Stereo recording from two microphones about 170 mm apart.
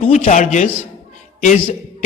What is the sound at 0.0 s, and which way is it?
Speech, 45° left (ahead or behind).